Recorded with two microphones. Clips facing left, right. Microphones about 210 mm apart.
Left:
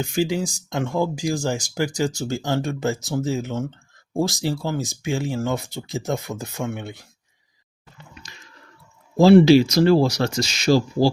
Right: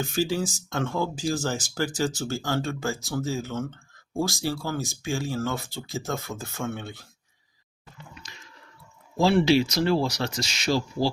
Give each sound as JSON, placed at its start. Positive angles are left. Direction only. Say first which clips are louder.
{"t": 0.0, "sound": "speech", "louder": "left 3 dB", "side_deg": 15}
{"t": 9.1, "sound": "speech", "louder": "left 8 dB", "side_deg": 40}